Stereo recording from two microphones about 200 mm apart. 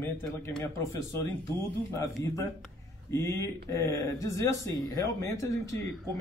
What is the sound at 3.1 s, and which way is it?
Speech, 15° left (ahead or behind).